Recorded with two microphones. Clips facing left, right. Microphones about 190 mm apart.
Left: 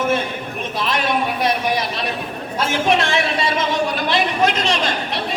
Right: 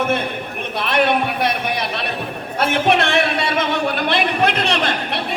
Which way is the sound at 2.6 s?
60° right (ahead or behind).